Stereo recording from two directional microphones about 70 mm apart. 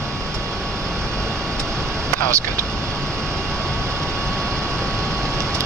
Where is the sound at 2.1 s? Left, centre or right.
Right.